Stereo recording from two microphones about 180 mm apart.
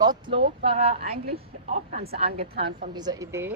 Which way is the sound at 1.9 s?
60° right (ahead or behind).